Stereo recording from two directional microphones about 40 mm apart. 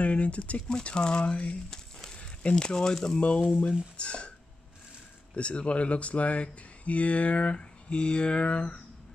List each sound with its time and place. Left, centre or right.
0.0 s speech: left
0.7 s speech: left
1.7 s a sound: centre
2.5 s speech: centre
3.9 s speech: left
5.3 s speech: left